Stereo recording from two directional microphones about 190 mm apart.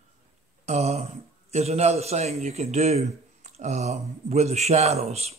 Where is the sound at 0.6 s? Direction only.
35° right (ahead or behind).